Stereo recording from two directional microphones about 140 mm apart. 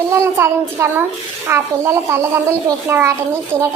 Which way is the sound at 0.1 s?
20° right (ahead or behind).